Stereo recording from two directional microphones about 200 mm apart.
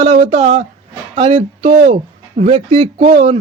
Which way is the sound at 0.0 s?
30° right (ahead or behind).